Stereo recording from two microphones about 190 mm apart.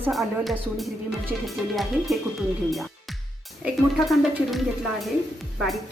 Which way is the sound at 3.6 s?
Centre (ahead or behind).